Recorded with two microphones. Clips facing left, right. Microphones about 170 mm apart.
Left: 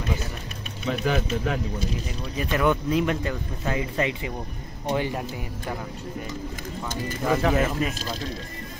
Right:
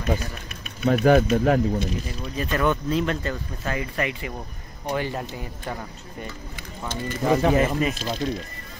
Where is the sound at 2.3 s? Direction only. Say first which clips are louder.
Even; 15° left (ahead or behind).